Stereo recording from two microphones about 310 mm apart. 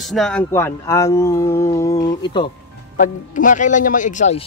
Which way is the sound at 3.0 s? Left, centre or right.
Left.